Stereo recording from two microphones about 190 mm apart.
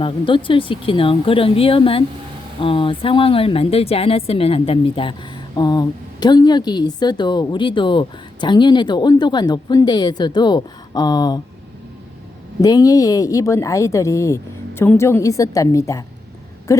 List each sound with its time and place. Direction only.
0.0 s a woman's voice: 25° left (ahead or behind)
12.6 s speech: 20° left (ahead or behind)